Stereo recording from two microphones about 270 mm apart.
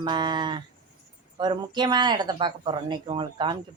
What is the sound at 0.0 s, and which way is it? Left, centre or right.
Speech, centre.